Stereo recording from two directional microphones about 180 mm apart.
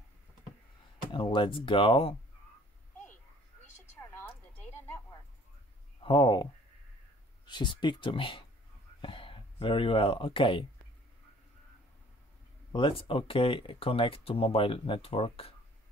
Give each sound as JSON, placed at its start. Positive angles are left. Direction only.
{"t": 1.1, "sound": "speech", "side_deg": 25}
{"t": 4.1, "sound": "a sound", "side_deg": 10}
{"t": 6.0, "sound": "speech", "side_deg": 25}
{"t": 12.7, "sound": "speech", "side_deg": 30}